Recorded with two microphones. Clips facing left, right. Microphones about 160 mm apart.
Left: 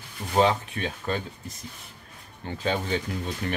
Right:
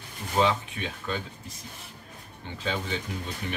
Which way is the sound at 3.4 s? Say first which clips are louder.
Left 5 dB; 55° left (ahead or behind).